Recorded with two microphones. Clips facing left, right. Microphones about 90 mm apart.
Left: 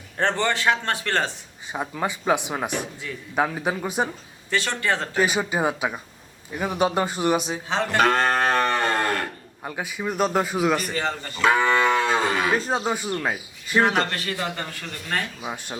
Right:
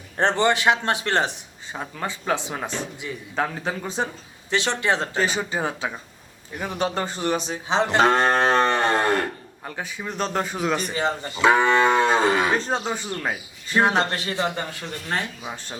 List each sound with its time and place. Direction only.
0.2 s speech: 20° right (ahead or behind)
1.7 s speech: 15° left (ahead or behind)
4.5 s speech: 20° right (ahead or behind)
5.2 s speech: 15° left (ahead or behind)
7.7 s cattle: 20° right (ahead or behind)
9.6 s speech: 10° left (ahead or behind)
10.9 s speech: 15° right (ahead or behind)
12.5 s speech: 10° left (ahead or behind)
13.7 s speech: 20° right (ahead or behind)
15.4 s speech: 15° left (ahead or behind)